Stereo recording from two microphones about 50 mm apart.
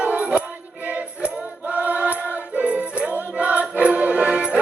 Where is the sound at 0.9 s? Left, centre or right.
Right.